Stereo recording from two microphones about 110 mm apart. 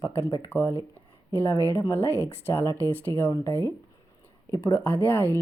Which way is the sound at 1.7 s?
30° left (ahead or behind).